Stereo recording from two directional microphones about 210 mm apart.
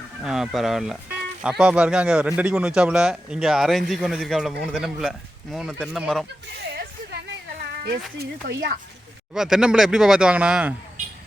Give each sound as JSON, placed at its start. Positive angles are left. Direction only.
{"t": 0.2, "sound": "speech", "side_deg": 0}
{"t": 6.6, "sound": "a sound", "side_deg": -50}
{"t": 8.2, "sound": "speech", "side_deg": -45}
{"t": 9.3, "sound": "speech", "side_deg": 0}